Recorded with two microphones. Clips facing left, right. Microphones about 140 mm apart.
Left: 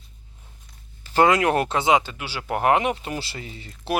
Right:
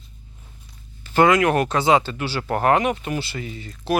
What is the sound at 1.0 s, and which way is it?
Speech, 30° left (ahead or behind).